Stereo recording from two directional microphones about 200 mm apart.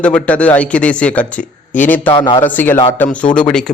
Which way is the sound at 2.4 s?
10° left (ahead or behind).